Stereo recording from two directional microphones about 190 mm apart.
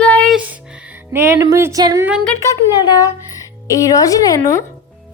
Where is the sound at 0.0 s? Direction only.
5° left (ahead or behind).